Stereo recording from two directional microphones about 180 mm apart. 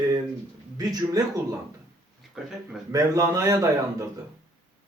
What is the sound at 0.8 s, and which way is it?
Speech, 20° right (ahead or behind).